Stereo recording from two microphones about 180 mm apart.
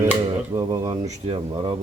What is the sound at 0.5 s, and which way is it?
Speech, 25° right (ahead or behind).